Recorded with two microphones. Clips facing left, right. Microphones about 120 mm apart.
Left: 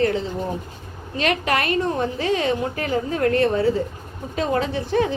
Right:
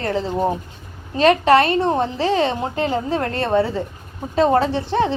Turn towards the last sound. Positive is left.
turn(degrees=-30)  # may be behind; listen again after turning